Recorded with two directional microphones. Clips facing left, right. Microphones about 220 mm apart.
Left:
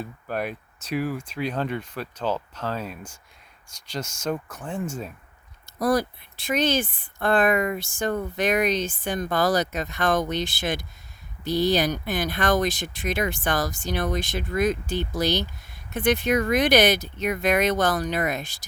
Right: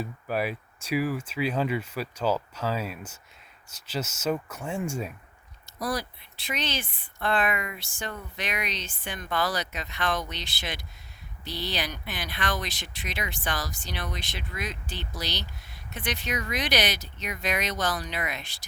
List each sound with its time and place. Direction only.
0.0 s speech: 5° right (ahead or behind)
5.8 s speech: 50° left (ahead or behind)